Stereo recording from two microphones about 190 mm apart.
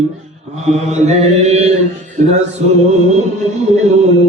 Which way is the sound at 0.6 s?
35° right (ahead or behind).